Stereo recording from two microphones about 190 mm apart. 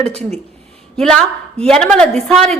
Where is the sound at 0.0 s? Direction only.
35° right (ahead or behind).